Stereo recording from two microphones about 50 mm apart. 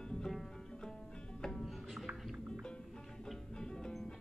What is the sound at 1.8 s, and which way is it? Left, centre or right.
Music, centre.